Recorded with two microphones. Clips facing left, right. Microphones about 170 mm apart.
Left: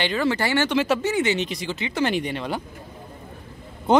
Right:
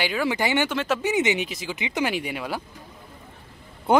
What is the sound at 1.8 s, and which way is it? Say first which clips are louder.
Speech: left 2 dB; 15° right (ahead or behind).